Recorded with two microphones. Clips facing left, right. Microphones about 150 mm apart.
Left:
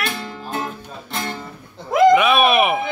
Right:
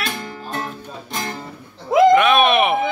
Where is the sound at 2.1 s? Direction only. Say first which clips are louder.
Right 1 dB; 5° left (ahead or behind).